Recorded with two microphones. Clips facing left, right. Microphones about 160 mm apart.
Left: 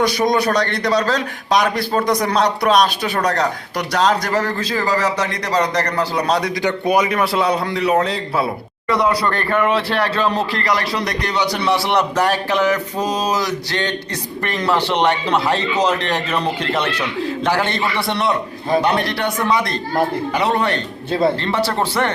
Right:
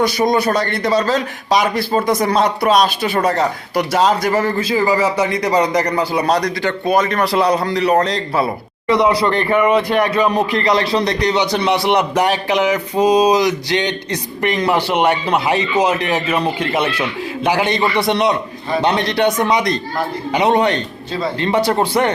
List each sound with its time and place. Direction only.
0.0 s a man's voice: centre (ahead or behind)
6.6 s a man's voice: 15° left (ahead or behind)
8.9 s speech: 20° right (ahead or behind)